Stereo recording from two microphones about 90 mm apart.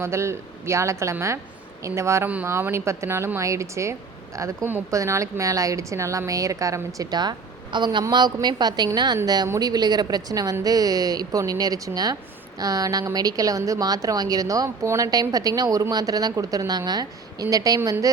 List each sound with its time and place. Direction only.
0.0 s a woman's voice: 30° right (ahead or behind)
2.2 s a woman's voice: 20° right (ahead or behind); by 17.7 s 40° right (ahead or behind)